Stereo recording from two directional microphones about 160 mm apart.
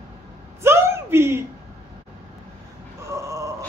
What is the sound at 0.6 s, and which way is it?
Speech, 15° right (ahead or behind).